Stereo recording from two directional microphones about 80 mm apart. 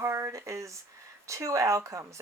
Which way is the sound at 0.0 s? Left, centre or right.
Right.